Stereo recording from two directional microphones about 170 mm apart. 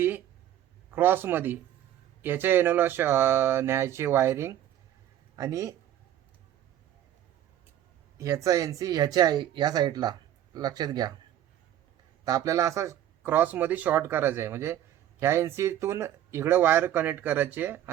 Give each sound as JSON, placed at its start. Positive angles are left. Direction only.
{"t": 0.9, "sound": "speech", "side_deg": -10}
{"t": 8.2, "sound": "speech", "side_deg": -20}
{"t": 12.2, "sound": "speech", "side_deg": -20}